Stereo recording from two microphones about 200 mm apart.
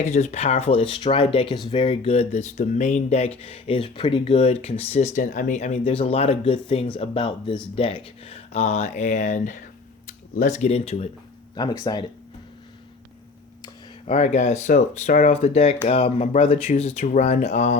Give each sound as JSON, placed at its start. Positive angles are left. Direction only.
{"t": 0.0, "sound": "speech", "side_deg": 35}
{"t": 5.1, "sound": "speech", "side_deg": 40}
{"t": 11.5, "sound": "speech", "side_deg": 20}
{"t": 14.1, "sound": "speech", "side_deg": 35}